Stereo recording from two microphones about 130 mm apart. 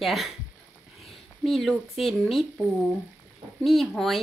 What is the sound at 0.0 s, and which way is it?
Speech, centre (ahead or behind).